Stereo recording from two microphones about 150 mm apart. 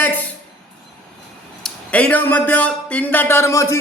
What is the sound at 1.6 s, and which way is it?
A man's voice, 10° left (ahead or behind).